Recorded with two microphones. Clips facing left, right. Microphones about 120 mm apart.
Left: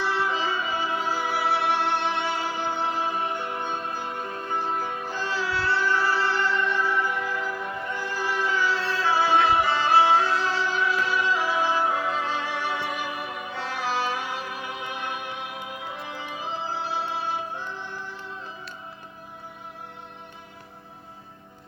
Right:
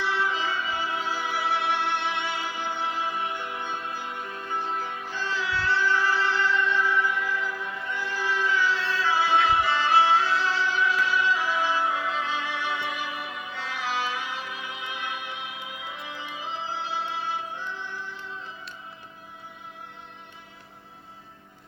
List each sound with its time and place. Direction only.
0.0 s music: 40° left (ahead or behind)